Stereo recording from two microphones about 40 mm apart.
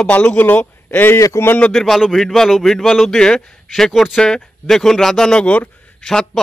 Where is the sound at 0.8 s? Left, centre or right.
Left.